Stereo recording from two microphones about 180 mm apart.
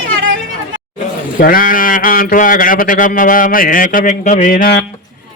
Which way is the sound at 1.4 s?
50° left (ahead or behind).